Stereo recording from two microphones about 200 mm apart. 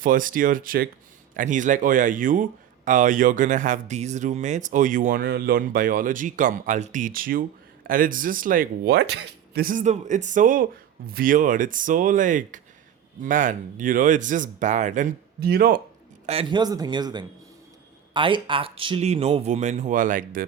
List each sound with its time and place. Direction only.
0.0 s speech: 45° right (ahead or behind)
16.2 s a man's voice: 30° right (ahead or behind)